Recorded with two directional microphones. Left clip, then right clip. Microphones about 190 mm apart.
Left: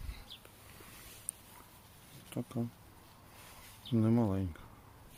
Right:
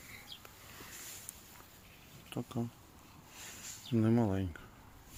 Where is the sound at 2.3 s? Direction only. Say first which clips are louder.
Even; 10° left (ahead or behind).